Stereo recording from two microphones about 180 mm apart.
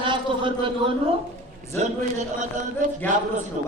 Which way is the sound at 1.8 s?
40° right (ahead or behind).